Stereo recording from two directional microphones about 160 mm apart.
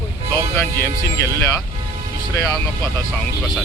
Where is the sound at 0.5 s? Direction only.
15° left (ahead or behind).